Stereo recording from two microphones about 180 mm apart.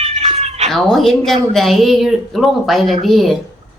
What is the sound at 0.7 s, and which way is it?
Speech, centre (ahead or behind).